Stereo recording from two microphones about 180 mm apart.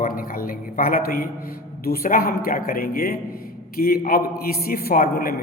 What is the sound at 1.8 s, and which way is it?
A man's voice, 55° left (ahead or behind).